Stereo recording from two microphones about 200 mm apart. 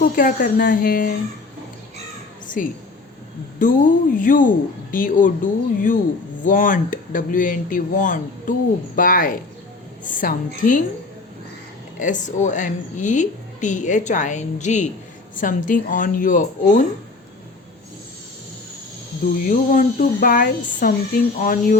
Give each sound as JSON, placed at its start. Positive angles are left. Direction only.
{"t": 0.0, "sound": "speech", "side_deg": 45}
{"t": 2.6, "sound": "a woman's voice", "side_deg": 40}
{"t": 11.9, "sound": "a woman's voice", "side_deg": 40}
{"t": 19.4, "sound": "speech", "side_deg": 40}